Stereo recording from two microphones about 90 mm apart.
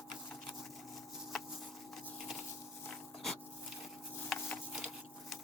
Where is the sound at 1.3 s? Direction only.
5° left (ahead or behind).